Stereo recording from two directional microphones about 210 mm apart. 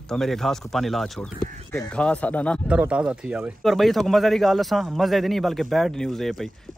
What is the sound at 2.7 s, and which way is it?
Speech, 5° right (ahead or behind).